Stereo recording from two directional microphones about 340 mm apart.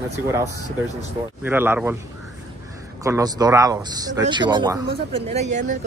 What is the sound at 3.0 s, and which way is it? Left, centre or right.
Speech, centre.